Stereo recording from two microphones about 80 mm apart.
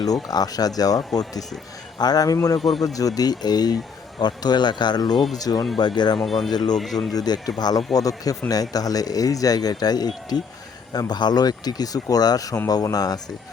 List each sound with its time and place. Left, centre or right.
0.0 s speech: left
5.7 s speech: left
6.1 s speech: centre
6.5 s speech: left